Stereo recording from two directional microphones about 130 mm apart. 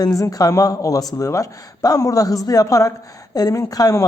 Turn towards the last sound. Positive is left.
turn(degrees=30)  # may be behind; listen again after turning